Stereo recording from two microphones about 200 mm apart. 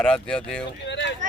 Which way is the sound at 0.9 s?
60° left (ahead or behind).